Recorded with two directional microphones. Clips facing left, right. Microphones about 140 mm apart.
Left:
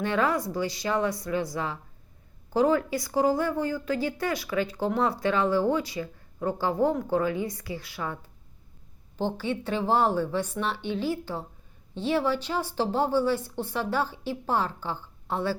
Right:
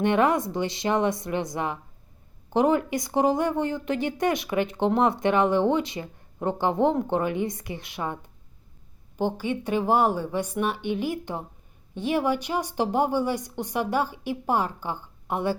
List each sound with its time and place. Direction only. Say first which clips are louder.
0.0 s a woman's voice: right 4 dB; 20° right (ahead or behind)